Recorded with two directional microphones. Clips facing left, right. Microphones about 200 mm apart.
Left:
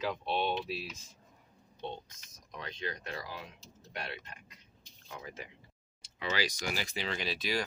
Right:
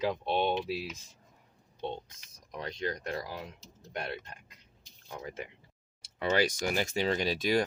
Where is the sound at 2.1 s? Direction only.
35° right (ahead or behind).